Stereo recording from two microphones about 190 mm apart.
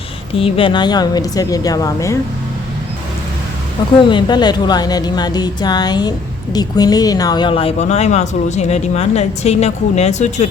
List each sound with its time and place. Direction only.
0.3 s speech: 30° left (ahead or behind)
4.1 s speech: 25° left (ahead or behind)